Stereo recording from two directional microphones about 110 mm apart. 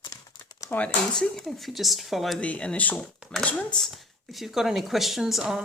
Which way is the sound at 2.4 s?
10° left (ahead or behind).